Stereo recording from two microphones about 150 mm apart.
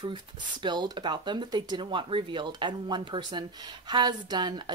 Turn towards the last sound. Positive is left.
turn(degrees=-30)  # may be behind; listen again after turning